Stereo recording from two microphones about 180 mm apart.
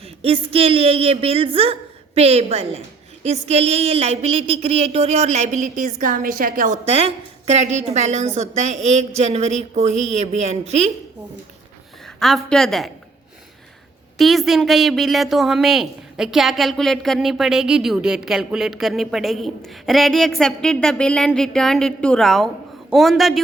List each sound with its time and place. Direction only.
0.0 s a woman's voice: 30° right (ahead or behind)
3.2 s a sound: 35° right (ahead or behind)
5.7 s a woman's voice: 50° right (ahead or behind)
6.8 s a sound: 35° right (ahead or behind)
12.0 s a woman's voice: centre (ahead or behind)
14.2 s a woman's voice: centre (ahead or behind)